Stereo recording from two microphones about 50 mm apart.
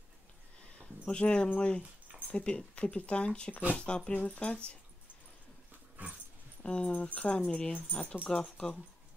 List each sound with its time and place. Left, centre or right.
1.0 s speech: centre
6.0 s dog: right
6.6 s speech: left